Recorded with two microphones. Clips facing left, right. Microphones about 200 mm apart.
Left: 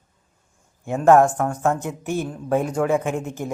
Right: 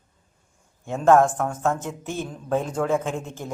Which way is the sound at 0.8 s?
10° left (ahead or behind).